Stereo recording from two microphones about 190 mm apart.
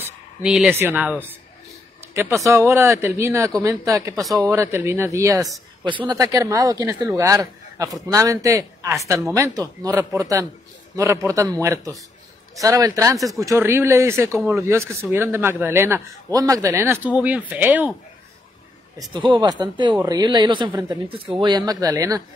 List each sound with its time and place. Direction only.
0.0 s speech: 5° right (ahead or behind)
18.9 s speech: 25° right (ahead or behind)